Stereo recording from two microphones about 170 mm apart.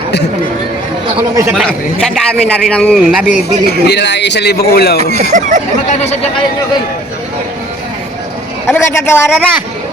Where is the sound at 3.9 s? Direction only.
90° left; by 5.0 s 65° left (ahead or behind).